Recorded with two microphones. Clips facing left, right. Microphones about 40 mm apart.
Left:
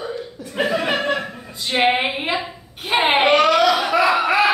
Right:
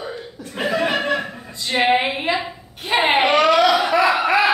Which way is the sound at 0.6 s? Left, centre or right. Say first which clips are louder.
Even; centre.